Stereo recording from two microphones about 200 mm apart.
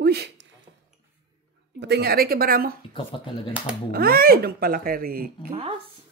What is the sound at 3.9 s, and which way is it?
Speech, 50° right (ahead or behind).